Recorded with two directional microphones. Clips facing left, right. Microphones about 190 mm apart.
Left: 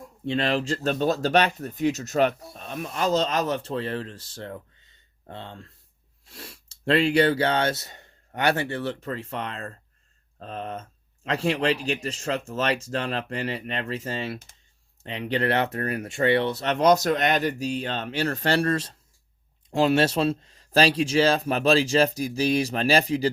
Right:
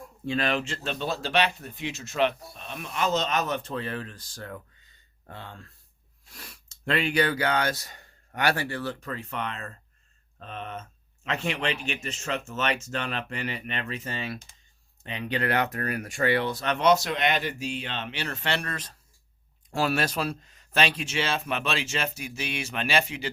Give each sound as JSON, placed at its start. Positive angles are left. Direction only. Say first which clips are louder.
{"t": 0.3, "sound": "speech", "louder": "left 3 dB", "side_deg": 30}